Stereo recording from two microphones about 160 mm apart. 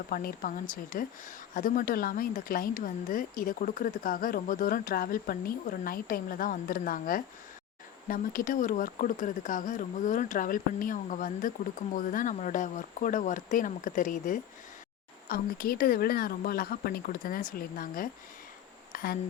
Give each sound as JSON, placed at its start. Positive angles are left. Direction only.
{"t": 0.1, "sound": "speech", "side_deg": 65}
{"t": 15.3, "sound": "speech", "side_deg": 70}